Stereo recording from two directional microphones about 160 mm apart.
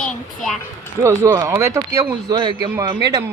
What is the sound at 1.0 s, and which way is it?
Speech, 20° right (ahead or behind).